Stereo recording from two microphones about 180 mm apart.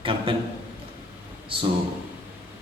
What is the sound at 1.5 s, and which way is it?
Speech, 30° right (ahead or behind).